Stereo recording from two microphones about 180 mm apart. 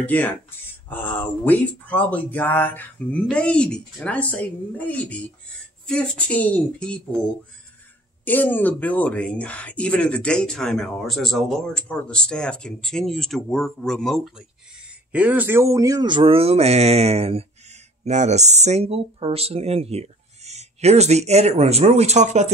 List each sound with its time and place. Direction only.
0.0 s speech: 10° left (ahead or behind)
8.3 s speech: 10° left (ahead or behind)
15.1 s speech: 10° right (ahead or behind); by 22.5 s 40° right (ahead or behind)